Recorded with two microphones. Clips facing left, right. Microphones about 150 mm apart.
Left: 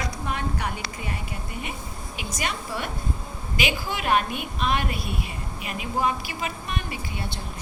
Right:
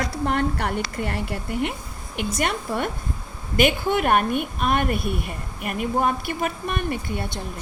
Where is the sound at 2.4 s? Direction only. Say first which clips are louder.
Right 5 dB; 55° right (ahead or behind).